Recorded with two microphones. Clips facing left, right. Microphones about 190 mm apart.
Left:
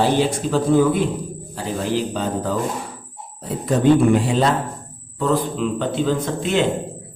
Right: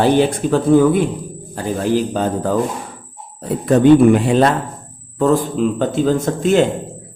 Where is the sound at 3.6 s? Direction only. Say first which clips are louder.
Right 6 dB; 65° right (ahead or behind).